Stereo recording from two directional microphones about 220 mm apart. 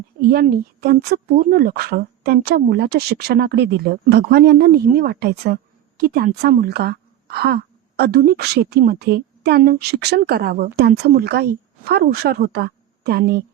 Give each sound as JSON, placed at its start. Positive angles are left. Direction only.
{"t": 0.2, "sound": "a woman's voice", "side_deg": -40}